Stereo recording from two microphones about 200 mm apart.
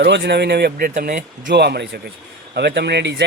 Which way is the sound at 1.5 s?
55° right (ahead or behind).